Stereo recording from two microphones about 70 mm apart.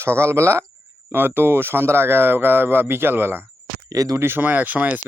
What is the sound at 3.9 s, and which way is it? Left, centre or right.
Speech, right.